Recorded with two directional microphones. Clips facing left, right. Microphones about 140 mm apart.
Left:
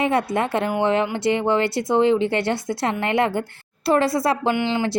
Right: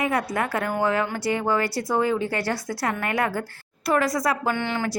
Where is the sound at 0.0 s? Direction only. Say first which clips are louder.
Left 4 dB; 25° left (ahead or behind).